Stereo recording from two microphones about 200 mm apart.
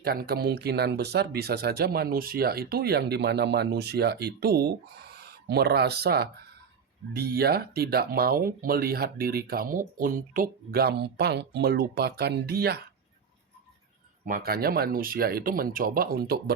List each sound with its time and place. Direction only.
0.0 s speech: 50° right (ahead or behind)
14.3 s speech: 45° right (ahead or behind)